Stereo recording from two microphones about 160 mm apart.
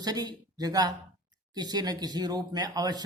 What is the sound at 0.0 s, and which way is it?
Speech, 25° right (ahead or behind).